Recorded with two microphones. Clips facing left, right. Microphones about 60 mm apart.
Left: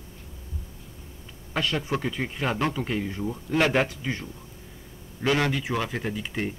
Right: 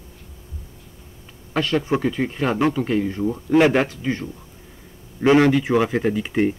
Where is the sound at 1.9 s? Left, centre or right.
Centre.